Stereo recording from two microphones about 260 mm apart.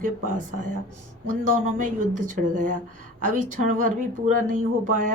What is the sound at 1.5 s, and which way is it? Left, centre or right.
Speech, right.